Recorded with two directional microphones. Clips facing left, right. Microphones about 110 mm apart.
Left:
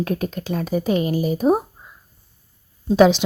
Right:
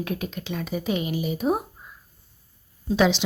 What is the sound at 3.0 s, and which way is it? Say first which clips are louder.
Speech: left 7 dB; 45° left (ahead or behind).